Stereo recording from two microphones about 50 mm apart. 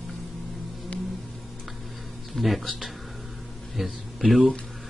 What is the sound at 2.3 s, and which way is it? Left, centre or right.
A man's voice, centre.